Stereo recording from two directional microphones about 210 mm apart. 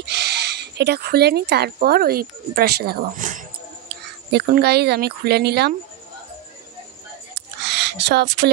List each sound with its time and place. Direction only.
0.0 s speech: 55° right (ahead or behind)
3.9 s speech: 50° right (ahead or behind)
7.6 s a sound: 55° right (ahead or behind)